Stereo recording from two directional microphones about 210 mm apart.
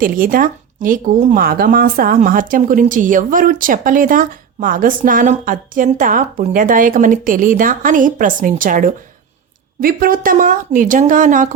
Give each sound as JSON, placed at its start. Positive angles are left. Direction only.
{"t": 0.0, "sound": "speech", "side_deg": -40}